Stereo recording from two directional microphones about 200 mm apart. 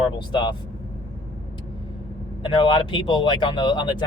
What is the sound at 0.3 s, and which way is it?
Speech, 25° left (ahead or behind).